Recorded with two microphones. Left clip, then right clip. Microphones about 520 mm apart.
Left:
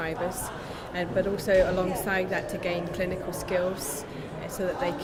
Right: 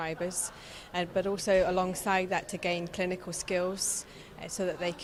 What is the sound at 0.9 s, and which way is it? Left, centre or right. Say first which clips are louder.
A woman's voice: left 3 dB; right.